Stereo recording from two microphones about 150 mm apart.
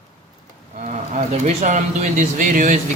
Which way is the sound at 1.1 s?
50° right (ahead or behind).